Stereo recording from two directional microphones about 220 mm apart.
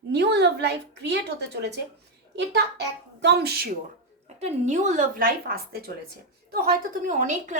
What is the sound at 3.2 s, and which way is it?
Speech, 50° right (ahead or behind).